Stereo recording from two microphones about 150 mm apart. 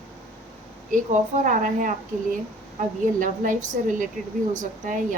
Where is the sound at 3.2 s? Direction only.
60° right (ahead or behind).